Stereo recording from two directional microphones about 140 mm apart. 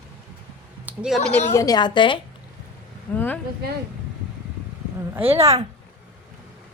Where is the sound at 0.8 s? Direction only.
5° right (ahead or behind).